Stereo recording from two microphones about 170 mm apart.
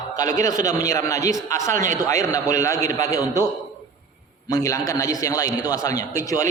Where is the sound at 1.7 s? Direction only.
50° right (ahead or behind).